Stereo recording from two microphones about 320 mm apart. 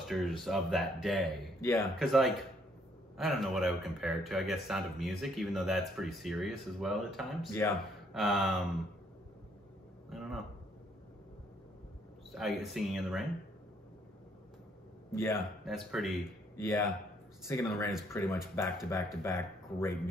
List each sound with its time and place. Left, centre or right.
0.1 s speech: centre
10.0 s speech: centre
12.3 s speech: centre
15.2 s speech: centre